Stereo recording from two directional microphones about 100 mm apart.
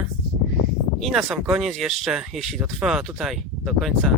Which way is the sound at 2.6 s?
10° right (ahead or behind).